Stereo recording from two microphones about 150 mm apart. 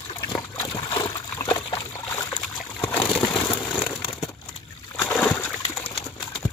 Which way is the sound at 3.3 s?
30° left (ahead or behind).